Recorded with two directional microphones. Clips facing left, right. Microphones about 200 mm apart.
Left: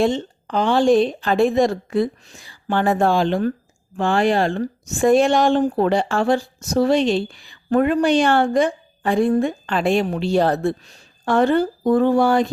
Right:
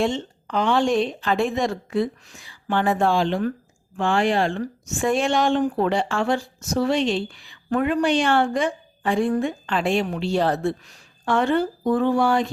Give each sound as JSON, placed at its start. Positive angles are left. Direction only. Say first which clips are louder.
{"t": 0.0, "sound": "a woman's voice", "louder": "left 4 dB", "side_deg": 35}